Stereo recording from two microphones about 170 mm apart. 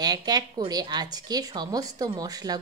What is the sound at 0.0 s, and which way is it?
Speech, 25° right (ahead or behind).